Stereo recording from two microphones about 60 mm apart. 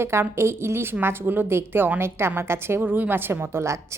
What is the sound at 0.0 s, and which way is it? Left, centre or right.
A woman's voice, right.